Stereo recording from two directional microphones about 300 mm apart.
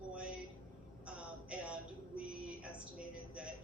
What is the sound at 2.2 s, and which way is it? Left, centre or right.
Female singing, centre.